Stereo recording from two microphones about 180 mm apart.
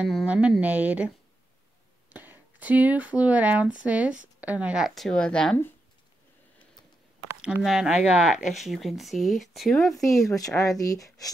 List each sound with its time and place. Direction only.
0.0 s speech: 5° right (ahead or behind)
2.1 s speech: 10° right (ahead or behind)
7.4 s speech: 5° right (ahead or behind)
10.3 s speech: 20° left (ahead or behind)